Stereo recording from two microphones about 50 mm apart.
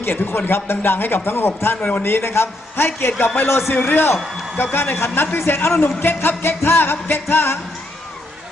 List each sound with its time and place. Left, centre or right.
0.0 s a man's voice: left
1.8 s a man's voice: left
2.0 s a man's voice: left